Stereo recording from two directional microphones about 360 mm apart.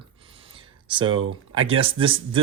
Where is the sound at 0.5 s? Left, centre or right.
Centre.